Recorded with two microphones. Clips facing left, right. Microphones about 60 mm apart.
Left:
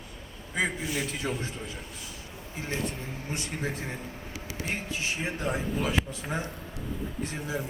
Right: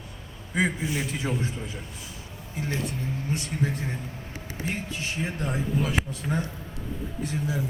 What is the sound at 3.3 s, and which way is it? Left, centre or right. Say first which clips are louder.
A man's voice: right 3 dB; centre.